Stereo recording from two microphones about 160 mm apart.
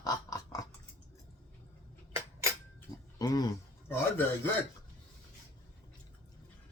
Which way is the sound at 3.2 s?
25° left (ahead or behind).